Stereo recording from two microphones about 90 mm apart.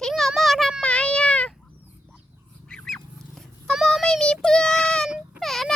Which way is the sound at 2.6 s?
5° left (ahead or behind).